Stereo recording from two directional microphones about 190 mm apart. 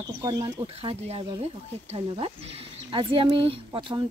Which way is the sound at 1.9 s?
30° right (ahead or behind).